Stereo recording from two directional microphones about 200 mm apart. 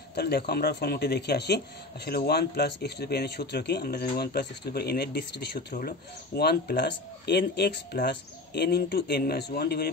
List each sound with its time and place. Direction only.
0.1 s speech: 55° left (ahead or behind)